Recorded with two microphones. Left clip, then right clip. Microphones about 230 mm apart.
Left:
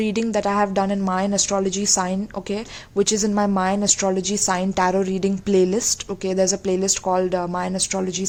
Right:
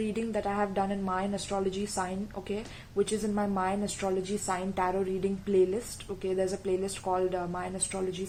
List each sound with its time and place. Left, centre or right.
0.0 s a woman's voice: left